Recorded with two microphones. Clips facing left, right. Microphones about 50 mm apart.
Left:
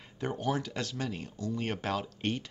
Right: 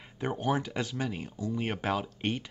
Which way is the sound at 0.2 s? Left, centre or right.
Centre.